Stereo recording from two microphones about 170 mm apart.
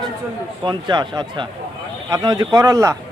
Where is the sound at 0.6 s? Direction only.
25° right (ahead or behind).